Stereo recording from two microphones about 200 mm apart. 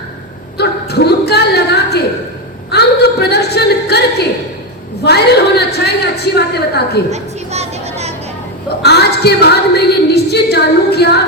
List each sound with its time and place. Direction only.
0.5 s a sound: 55° left (ahead or behind)
7.1 s music: 35° right (ahead or behind)
8.8 s a woman's voice: 55° left (ahead or behind)